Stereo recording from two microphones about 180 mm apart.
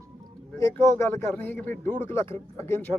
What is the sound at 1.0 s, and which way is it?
A man's voice, 10° left (ahead or behind).